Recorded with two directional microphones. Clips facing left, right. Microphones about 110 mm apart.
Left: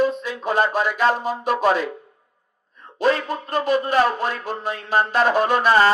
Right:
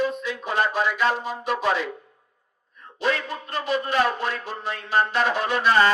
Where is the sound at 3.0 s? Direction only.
45° left (ahead or behind).